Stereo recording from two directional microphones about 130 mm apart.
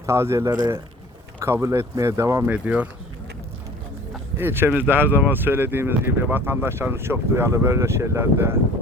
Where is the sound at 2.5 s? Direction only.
10° right (ahead or behind).